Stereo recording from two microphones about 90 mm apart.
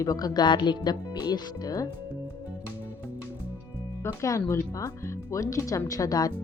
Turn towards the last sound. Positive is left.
turn(degrees=40)  # may be behind; listen again after turning